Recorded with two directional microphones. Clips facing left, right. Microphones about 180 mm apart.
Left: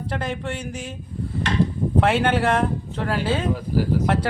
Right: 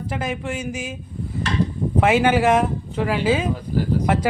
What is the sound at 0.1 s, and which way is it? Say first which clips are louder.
Speech: right 1 dB; 10° right (ahead or behind).